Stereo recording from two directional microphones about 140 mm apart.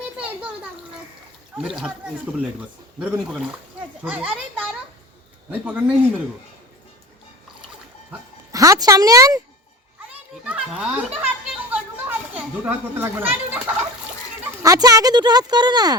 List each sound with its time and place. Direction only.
1.5 s a child's voice: 5° right (ahead or behind)
8.5 s speech: 25° right (ahead or behind)
10.4 s a child's voice: 10° right (ahead or behind)
14.6 s speech: 25° right (ahead or behind)